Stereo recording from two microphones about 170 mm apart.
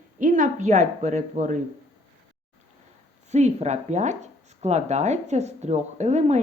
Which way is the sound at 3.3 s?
40° right (ahead or behind).